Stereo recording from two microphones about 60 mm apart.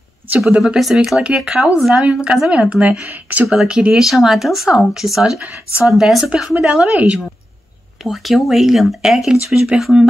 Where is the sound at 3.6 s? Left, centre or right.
Centre.